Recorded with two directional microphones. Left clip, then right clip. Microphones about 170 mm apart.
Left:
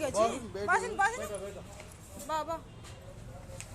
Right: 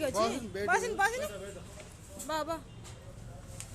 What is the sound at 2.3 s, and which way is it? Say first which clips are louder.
Speech: even; 45° right (ahead or behind).